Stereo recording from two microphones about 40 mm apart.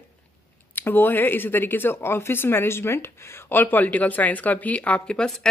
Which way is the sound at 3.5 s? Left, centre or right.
Left.